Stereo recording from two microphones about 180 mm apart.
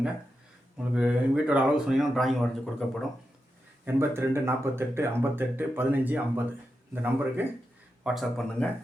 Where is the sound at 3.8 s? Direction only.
15° right (ahead or behind); by 8.7 s 5° left (ahead or behind).